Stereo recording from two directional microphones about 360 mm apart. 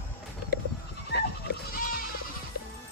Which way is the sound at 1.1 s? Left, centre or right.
Left.